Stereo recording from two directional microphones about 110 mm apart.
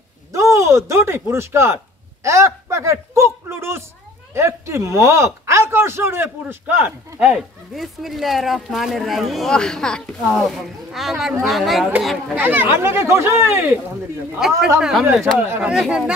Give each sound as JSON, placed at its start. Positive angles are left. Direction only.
{"t": 0.3, "sound": "a sound", "side_deg": -30}
{"t": 1.3, "sound": "speech", "side_deg": -25}
{"t": 7.2, "sound": "speech", "side_deg": -5}
{"t": 12.4, "sound": "speech", "side_deg": -20}
{"t": 14.4, "sound": "speech", "side_deg": -5}
{"t": 15.3, "sound": "speech", "side_deg": -20}
{"t": 15.7, "sound": "speech", "side_deg": -5}